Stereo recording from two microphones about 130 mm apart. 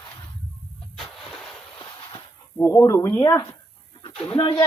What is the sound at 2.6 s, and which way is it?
Speech, 20° left (ahead or behind).